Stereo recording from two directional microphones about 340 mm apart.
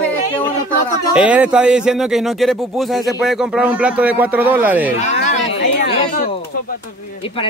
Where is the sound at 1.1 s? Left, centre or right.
Centre.